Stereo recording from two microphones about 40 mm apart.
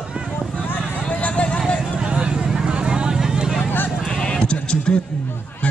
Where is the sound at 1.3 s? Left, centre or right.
Left.